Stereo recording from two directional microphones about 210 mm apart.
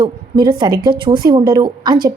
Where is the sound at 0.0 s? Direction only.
20° right (ahead or behind).